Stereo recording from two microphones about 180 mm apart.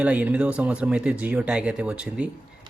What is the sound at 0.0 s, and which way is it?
Speech, 5° right (ahead or behind).